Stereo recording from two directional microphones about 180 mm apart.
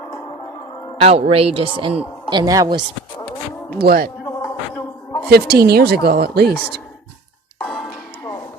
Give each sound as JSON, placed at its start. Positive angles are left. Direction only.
{"t": 1.0, "sound": "a woman's voice", "side_deg": -35}
{"t": 2.4, "sound": "a woman's voice", "side_deg": -20}
{"t": 3.8, "sound": "a woman's voice", "side_deg": -60}
{"t": 5.3, "sound": "a woman's voice", "side_deg": -60}
{"t": 7.6, "sound": "music", "side_deg": 0}